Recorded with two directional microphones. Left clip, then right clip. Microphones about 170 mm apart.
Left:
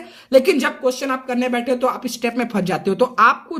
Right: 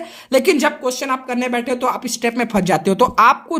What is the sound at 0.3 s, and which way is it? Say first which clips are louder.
Speech: even; 40° right (ahead or behind).